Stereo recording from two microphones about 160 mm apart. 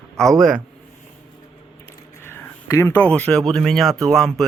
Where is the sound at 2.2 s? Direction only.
15° left (ahead or behind).